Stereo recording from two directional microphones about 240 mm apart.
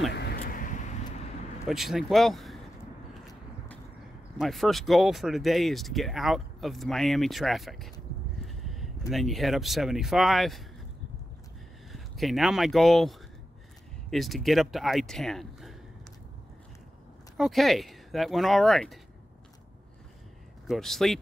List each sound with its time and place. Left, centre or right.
0.1 s vehicle: left
1.7 s speech: centre
4.4 s speech: centre
8.5 s a sound: centre
9.1 s speech: centre
11.9 s speech: centre
14.1 s speech: centre
17.4 s speech: centre
20.6 s speech: centre